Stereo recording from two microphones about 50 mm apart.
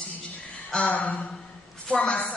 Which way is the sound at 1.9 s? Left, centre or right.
Centre.